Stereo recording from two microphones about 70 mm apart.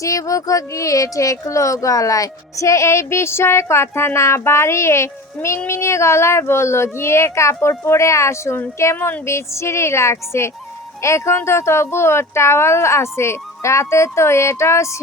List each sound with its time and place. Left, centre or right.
0.0 s speech: left